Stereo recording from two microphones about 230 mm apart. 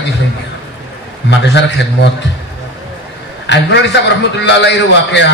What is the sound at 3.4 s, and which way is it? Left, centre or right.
A man's voice, left.